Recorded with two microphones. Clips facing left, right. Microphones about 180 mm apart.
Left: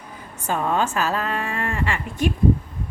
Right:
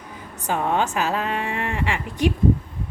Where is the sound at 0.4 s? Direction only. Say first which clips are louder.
Even; 15° right (ahead or behind).